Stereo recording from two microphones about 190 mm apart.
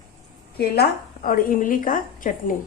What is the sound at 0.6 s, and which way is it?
A woman's voice, 50° left (ahead or behind).